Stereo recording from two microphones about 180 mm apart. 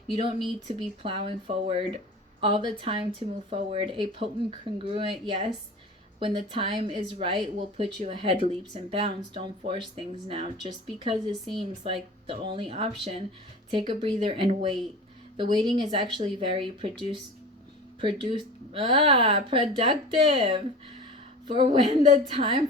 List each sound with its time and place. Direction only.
0.8 s speech: 30° right (ahead or behind)
21.8 s speech: 40° right (ahead or behind)
22.3 s speech: 30° right (ahead or behind)